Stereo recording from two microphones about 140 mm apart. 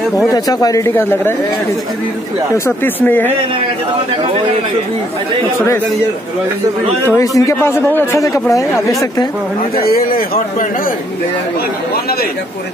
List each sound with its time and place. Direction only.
0.3 s a man's voice: 25° left (ahead or behind)
2.5 s speech: 15° left (ahead or behind)
7.2 s a man's voice: 20° left (ahead or behind)
9.8 s a man's voice: 90° left